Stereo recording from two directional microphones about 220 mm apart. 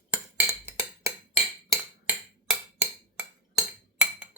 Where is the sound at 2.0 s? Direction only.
5° right (ahead or behind).